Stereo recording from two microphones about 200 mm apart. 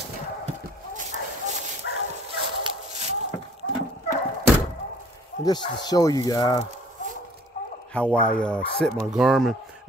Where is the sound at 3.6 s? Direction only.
90° left.